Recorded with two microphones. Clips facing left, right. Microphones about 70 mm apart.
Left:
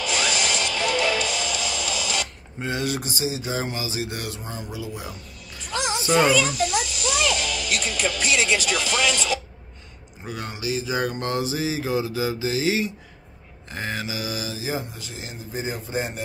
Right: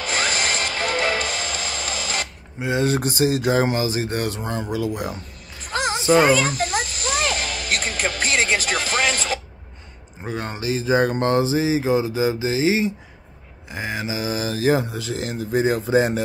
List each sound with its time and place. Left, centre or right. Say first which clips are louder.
0.0 s music: right 1 dB; right
3.0 s speech: right 8 dB; right
4.4 s speech: right 9 dB; right
5.6 s music: right 3 dB; right
6.0 s children playing: right 3 dB; right
10.2 s speech: right 4 dB; right
13.7 s speech: right 2 dB; centre
14.0 s speech: right 5 dB; right
14.5 s speech: right 14 dB; right
14.8 s speech: right 9 dB; right